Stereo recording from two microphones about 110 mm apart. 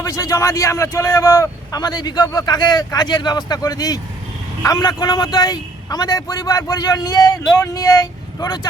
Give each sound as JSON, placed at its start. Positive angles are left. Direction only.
{"t": 0.0, "sound": "a man's voice", "side_deg": 35}